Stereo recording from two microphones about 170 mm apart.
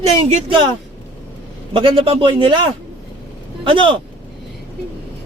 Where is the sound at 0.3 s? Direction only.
30° right (ahead or behind).